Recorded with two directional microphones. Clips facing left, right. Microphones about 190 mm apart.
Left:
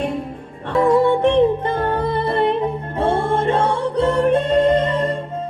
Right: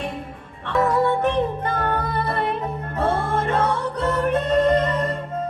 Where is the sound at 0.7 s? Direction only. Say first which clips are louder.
Left 5 dB; 30° left (ahead or behind).